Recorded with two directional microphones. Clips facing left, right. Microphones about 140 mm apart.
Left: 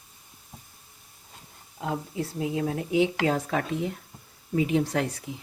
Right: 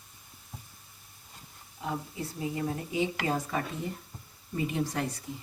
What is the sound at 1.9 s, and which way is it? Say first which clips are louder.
A woman's voice: left 5 dB; 90° left.